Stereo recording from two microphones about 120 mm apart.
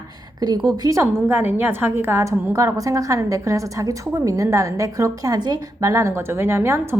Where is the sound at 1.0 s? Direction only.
20° right (ahead or behind).